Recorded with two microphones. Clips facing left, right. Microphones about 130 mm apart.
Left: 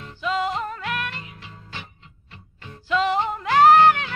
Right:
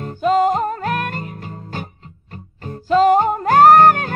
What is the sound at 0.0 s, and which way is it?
Music, 45° right (ahead or behind).